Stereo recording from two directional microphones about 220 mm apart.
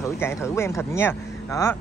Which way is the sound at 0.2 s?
10° left (ahead or behind).